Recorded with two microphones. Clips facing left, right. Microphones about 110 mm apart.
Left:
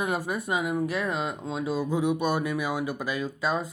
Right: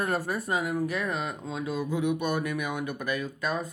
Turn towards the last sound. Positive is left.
turn(degrees=25)  # may be behind; listen again after turning